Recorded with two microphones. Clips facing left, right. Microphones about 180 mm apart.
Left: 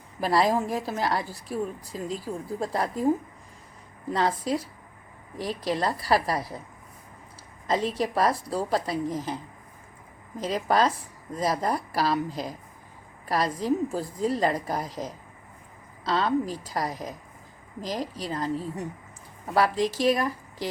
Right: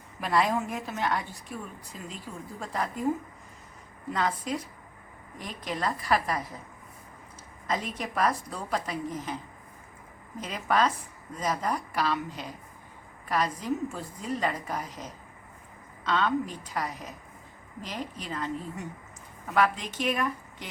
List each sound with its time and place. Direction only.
0.2 s a woman's voice: 35° left (ahead or behind)
4.1 s a woman's voice: 30° left (ahead or behind)
7.7 s a woman's voice: 30° left (ahead or behind)
10.4 s a woman's voice: 35° left (ahead or behind)